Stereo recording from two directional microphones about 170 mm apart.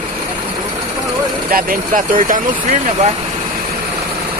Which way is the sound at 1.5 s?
55° right (ahead or behind).